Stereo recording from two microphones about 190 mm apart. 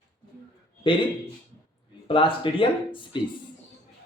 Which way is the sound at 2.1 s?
25° left (ahead or behind).